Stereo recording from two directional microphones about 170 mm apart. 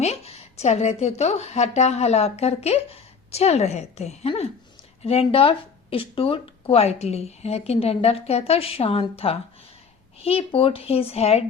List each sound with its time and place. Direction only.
0.0 s a woman's voice: 40° left (ahead or behind)